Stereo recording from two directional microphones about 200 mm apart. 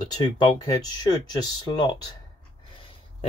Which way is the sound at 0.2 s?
20° left (ahead or behind).